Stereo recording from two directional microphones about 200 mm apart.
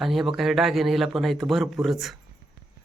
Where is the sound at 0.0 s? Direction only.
Centre (ahead or behind).